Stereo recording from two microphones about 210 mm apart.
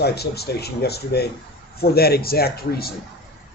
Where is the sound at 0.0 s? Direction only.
50° left (ahead or behind).